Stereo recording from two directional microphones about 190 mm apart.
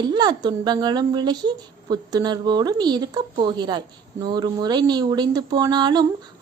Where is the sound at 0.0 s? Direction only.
20° right (ahead or behind).